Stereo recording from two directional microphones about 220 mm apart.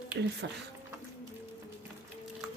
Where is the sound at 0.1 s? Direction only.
50° right (ahead or behind).